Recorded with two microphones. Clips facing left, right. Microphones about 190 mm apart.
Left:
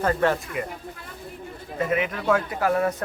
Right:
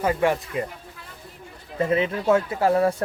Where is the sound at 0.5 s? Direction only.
30° right (ahead or behind).